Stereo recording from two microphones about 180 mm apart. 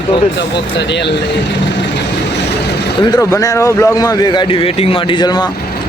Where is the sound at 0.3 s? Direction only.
75° left (ahead or behind).